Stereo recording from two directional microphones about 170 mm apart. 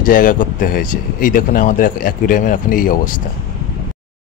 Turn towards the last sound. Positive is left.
turn(degrees=50)  # may be behind; listen again after turning